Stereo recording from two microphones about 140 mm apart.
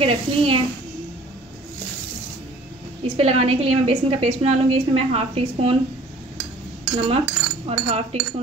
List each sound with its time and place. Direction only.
0.0 s a child's voice: 40° right (ahead or behind)
3.2 s a woman's voice: 45° right (ahead or behind)
7.0 s speech: 45° right (ahead or behind)